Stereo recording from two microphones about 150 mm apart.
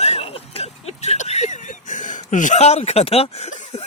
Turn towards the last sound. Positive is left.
turn(degrees=45)  # may be behind; listen again after turning